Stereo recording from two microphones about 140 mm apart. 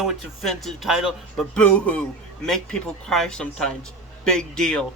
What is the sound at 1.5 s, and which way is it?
Speech, 10° left (ahead or behind).